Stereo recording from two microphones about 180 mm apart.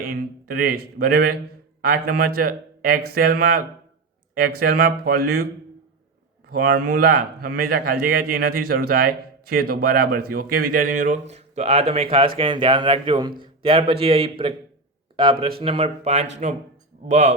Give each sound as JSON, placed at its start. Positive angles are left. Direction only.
{"t": 0.1, "sound": "speech", "side_deg": -55}
{"t": 6.5, "sound": "a man's voice", "side_deg": -55}